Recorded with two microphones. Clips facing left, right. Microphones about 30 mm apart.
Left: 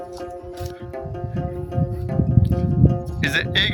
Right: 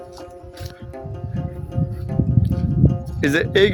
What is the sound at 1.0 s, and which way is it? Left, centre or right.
Music, centre.